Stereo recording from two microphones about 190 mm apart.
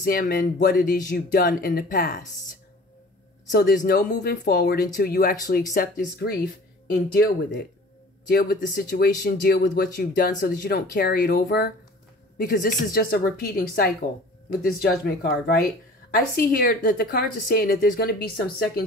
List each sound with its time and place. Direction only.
0.0 s speech: 50° left (ahead or behind)
3.5 s speech: 50° left (ahead or behind)
8.3 s speech: 55° left (ahead or behind)